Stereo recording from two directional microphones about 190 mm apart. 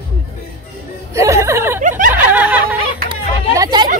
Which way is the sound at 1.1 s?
15° right (ahead or behind).